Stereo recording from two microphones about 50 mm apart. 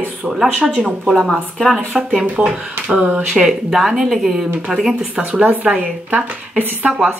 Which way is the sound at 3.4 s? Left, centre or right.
Centre.